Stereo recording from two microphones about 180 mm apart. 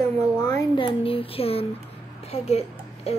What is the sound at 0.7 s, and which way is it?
A child's voice, 30° left (ahead or behind).